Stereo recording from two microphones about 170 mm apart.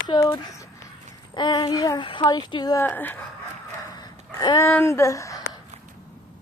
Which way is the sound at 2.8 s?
10° left (ahead or behind).